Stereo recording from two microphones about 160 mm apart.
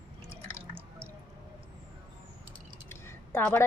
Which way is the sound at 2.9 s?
15° left (ahead or behind).